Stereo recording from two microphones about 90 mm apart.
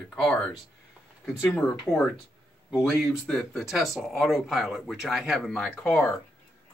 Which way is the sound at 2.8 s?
Centre (ahead or behind).